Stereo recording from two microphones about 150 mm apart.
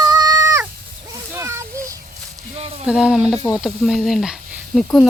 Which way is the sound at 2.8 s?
5° right (ahead or behind).